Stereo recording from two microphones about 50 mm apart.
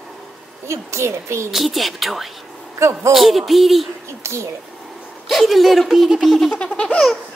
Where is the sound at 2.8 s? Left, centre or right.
Right.